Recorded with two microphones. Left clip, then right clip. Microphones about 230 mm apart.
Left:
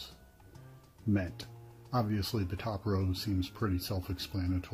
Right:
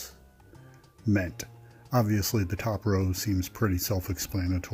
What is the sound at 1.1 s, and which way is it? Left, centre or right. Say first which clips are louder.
Speech: right 6 dB; right.